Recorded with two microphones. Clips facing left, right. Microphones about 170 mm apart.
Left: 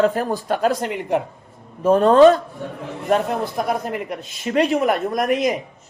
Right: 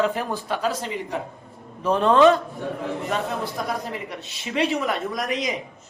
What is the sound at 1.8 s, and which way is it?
Speech, 45° left (ahead or behind).